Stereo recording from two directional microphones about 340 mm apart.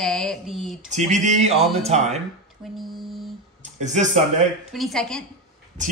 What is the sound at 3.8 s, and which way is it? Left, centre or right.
Speech, right.